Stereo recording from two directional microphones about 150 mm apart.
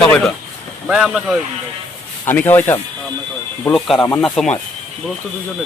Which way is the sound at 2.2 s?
10° left (ahead or behind).